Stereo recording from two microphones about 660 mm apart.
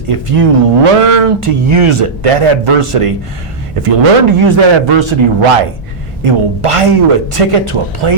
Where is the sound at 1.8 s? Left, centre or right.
Right.